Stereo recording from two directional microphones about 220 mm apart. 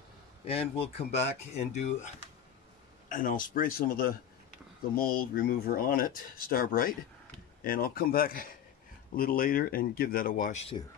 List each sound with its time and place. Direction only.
0.5 s speech: 25° left (ahead or behind)
3.1 s speech: 35° left (ahead or behind)